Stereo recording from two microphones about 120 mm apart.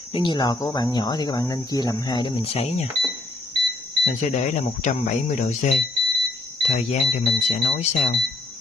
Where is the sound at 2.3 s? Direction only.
55° left (ahead or behind).